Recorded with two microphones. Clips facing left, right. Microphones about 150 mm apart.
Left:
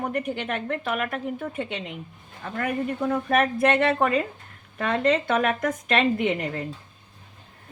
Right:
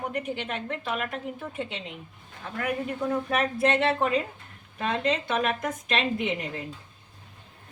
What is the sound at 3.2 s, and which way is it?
Speech, 55° left (ahead or behind).